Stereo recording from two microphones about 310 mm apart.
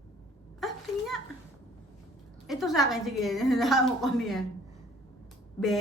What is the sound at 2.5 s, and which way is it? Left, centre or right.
A woman's voice, centre.